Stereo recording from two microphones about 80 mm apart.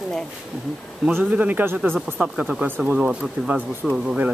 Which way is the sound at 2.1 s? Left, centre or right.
Centre.